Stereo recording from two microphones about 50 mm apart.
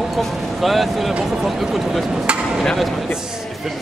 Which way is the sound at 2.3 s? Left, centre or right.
Right.